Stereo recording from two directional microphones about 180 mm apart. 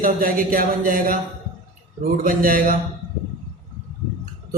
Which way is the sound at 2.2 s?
50° right (ahead or behind).